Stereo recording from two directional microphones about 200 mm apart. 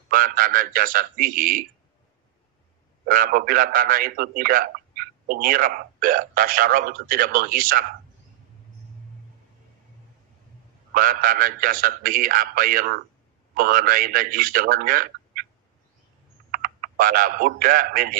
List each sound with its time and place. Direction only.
0.1 s a man's voice: 45° right (ahead or behind)
3.1 s a man's voice: 45° right (ahead or behind)
10.9 s a man's voice: 45° right (ahead or behind)
16.5 s speech: 45° right (ahead or behind)